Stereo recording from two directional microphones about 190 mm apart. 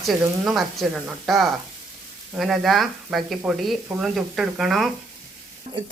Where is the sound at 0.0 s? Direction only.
Centre (ahead or behind).